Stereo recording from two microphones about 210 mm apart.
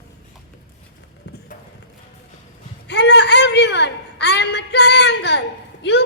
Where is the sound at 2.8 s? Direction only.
55° left (ahead or behind).